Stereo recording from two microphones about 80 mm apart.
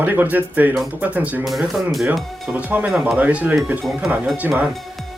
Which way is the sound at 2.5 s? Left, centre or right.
Centre.